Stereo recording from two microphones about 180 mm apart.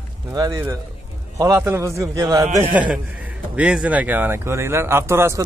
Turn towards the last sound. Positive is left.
turn(degrees=-15)  # may be behind; listen again after turning